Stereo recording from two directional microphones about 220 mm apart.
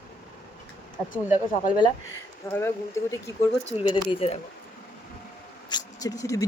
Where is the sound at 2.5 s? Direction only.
10° left (ahead or behind).